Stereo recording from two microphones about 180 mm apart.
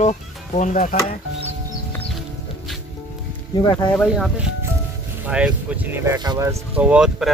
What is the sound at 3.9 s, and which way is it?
Speech, centre (ahead or behind).